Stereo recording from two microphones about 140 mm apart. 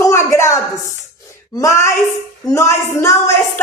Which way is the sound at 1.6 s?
20° left (ahead or behind).